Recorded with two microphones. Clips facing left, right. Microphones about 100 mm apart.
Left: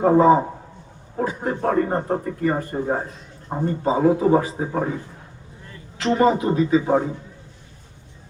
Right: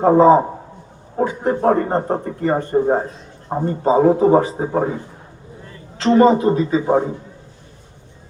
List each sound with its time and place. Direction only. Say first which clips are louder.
0.0 s a man's voice: right 4 dB; 30° right (ahead or behind)
6.1 s a man's voice: right 5 dB; 35° right (ahead or behind)